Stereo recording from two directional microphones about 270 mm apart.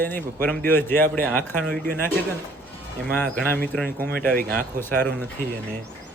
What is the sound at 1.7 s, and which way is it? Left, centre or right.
Speech, right.